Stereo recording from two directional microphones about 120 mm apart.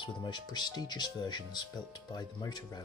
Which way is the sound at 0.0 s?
40° left (ahead or behind).